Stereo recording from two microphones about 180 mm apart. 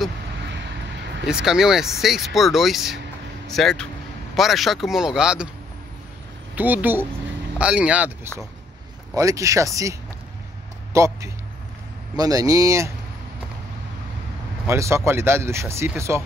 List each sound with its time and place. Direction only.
1.2 s speech: 5° right (ahead or behind)
6.5 s speech: 10° right (ahead or behind)
9.1 s speech: 20° right (ahead or behind)
14.7 s speech: 15° right (ahead or behind)